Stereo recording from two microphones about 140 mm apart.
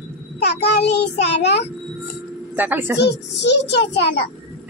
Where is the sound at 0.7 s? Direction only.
45° left (ahead or behind).